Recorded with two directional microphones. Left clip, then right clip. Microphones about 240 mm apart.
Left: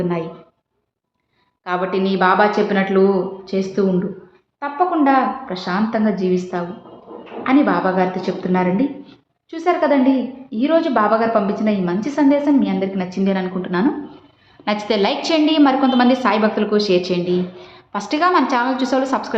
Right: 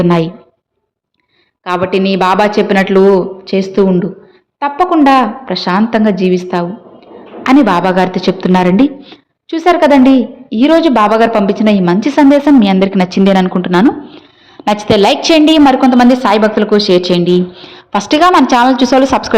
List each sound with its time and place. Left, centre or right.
0.0 s a woman's voice: right
1.6 s a woman's voice: right